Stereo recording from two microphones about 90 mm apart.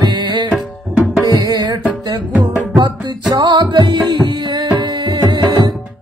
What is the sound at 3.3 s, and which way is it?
Music, 55° right (ahead or behind).